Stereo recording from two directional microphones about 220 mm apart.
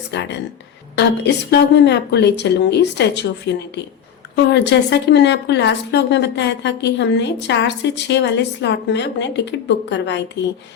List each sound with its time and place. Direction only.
0.1 s a woman's voice: 50° left (ahead or behind)